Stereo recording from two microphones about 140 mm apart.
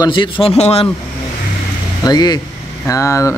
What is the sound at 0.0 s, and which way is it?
Speech, 35° left (ahead or behind).